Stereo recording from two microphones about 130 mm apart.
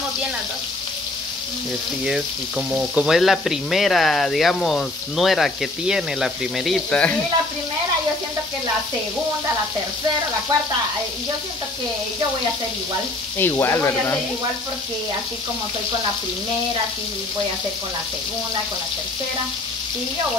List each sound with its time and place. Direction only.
2.0 s frying: 5° right (ahead or behind); by 7.2 s 10° left (ahead or behind)
13.4 s speech: 20° left (ahead or behind)